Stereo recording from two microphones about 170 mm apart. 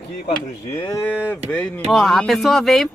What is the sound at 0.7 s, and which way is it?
Moo, 20° left (ahead or behind).